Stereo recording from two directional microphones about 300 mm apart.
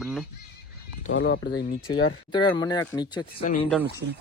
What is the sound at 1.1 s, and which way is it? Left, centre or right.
Speech, left.